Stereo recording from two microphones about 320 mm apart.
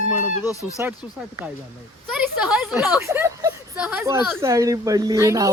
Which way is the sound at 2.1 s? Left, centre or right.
Centre.